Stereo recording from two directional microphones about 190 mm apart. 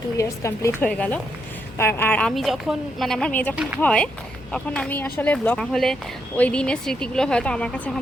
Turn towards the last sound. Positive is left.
turn(degrees=5)  # may be behind; listen again after turning